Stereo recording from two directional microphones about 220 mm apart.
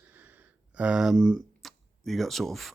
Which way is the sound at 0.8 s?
5° right (ahead or behind).